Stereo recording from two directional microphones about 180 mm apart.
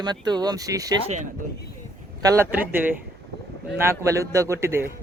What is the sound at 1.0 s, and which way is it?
Speech, 40° right (ahead or behind).